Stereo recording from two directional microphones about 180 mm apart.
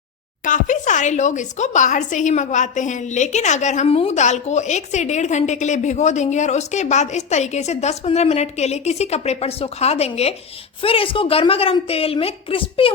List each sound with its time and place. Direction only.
0.4 s speech: 45° left (ahead or behind); by 12.9 s 30° left (ahead or behind)